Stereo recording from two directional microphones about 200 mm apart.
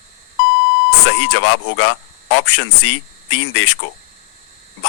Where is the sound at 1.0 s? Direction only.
85° left.